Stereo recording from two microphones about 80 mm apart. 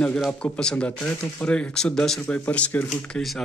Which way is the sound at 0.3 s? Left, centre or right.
Centre.